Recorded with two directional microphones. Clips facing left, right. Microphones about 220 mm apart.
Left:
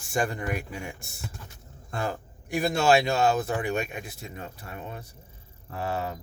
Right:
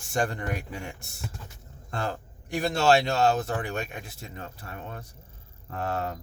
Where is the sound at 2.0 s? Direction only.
10° left (ahead or behind).